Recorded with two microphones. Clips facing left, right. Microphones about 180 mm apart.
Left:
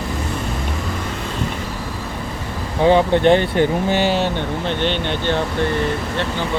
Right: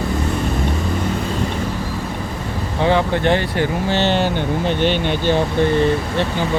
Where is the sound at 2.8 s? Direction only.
15° left (ahead or behind).